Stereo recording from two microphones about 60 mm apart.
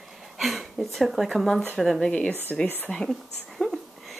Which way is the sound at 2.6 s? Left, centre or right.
Left.